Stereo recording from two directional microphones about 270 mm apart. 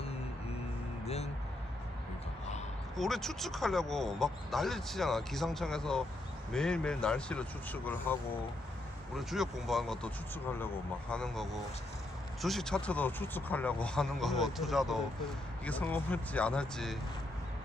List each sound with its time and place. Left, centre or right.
1.0 s speech: left
2.9 s speech: centre